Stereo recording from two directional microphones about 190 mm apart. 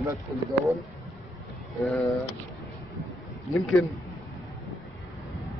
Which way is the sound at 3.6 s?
Centre (ahead or behind).